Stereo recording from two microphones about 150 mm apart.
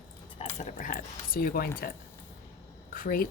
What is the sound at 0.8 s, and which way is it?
Speech, 65° left (ahead or behind).